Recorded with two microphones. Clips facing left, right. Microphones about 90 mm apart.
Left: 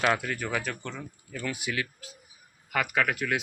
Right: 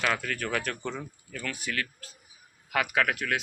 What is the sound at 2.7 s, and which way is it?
Speech, centre (ahead or behind).